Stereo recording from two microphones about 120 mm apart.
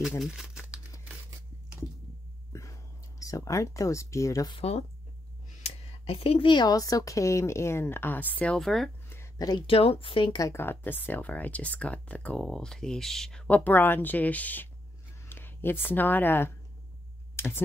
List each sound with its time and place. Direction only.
0.2 s crumpling: 5° right (ahead or behind)
2.5 s whispering: 25° left (ahead or behind)
4.5 s speech: 55° left (ahead or behind); by 8.5 s 15° left (ahead or behind)
8.5 s speech: centre (ahead or behind)
9.4 s speech: 35° left (ahead or behind)
9.7 s speech: 50° left (ahead or behind)
10.4 s speech: 20° left (ahead or behind)
17.4 s a sound: 20° left (ahead or behind)